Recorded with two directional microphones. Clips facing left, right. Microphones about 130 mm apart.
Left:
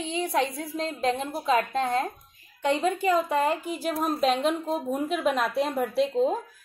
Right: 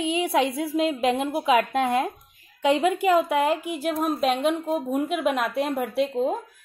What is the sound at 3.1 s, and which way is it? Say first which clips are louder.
Speech: right 3 dB; 10° right (ahead or behind).